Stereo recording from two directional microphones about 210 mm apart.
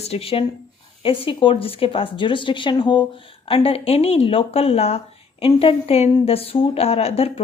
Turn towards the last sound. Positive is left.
turn(degrees=30)  # may be behind; listen again after turning